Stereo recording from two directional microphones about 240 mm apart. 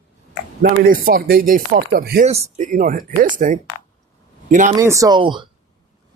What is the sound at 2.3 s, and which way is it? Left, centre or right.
Speech, right.